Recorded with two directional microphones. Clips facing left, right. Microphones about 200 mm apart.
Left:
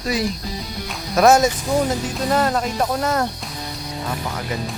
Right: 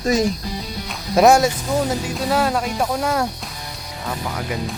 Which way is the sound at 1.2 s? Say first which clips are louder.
Right 1 dB; 30° right (ahead or behind).